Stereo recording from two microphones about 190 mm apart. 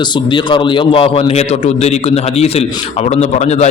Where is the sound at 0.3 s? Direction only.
25° left (ahead or behind).